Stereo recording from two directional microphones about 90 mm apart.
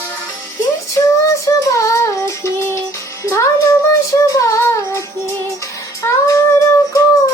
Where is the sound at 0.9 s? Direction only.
35° left (ahead or behind).